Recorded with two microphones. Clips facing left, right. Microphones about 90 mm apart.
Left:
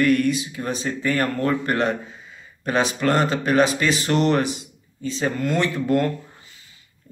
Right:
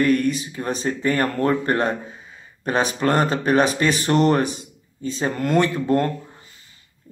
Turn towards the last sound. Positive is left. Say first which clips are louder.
# right 1 dB
turn(degrees=-35)  # may be behind; listen again after turning